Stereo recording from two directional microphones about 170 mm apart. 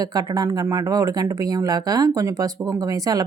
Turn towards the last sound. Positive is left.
turn(degrees=-20)  # may be behind; listen again after turning